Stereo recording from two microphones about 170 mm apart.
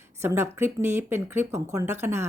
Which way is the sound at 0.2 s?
15° right (ahead or behind).